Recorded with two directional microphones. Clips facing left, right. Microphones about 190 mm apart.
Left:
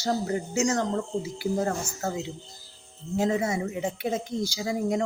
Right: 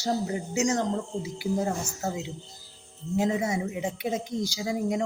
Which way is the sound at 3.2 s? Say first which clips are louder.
Left 2 dB; 15° right (ahead or behind).